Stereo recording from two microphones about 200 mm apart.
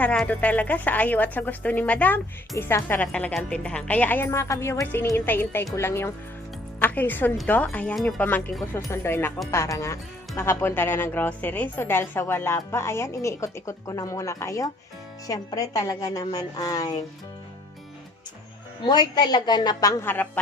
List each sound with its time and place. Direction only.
0.0 s a woman's voice: 5° left (ahead or behind)
18.9 s a woman's voice: 20° left (ahead or behind)